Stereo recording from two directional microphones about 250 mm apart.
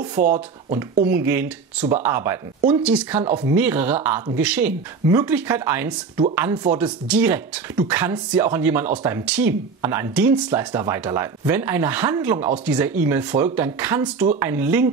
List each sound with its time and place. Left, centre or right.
0.2 s speech: right
1.1 s speech: centre